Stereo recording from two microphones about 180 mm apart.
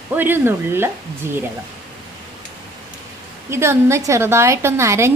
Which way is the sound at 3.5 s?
15° right (ahead or behind).